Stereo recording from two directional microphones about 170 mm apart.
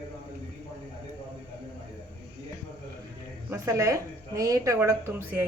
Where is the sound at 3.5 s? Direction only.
15° right (ahead or behind).